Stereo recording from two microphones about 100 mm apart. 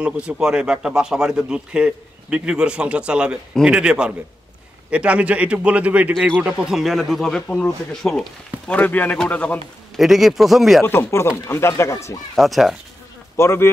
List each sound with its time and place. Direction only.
0.0 s speech: 10° right (ahead or behind); by 9.6 s 15° left (ahead or behind)
9.9 s speech: centre (ahead or behind)
10.8 s speech: 25° left (ahead or behind)
12.4 s speech: centre (ahead or behind)
13.4 s speech: 30° left (ahead or behind)